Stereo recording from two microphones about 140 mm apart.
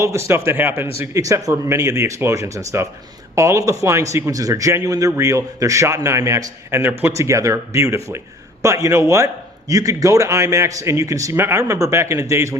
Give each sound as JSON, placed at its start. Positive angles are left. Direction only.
{"t": 0.0, "sound": "a man's voice", "side_deg": -20}